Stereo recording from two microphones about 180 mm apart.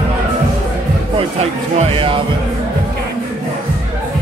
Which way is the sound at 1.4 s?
35° right (ahead or behind).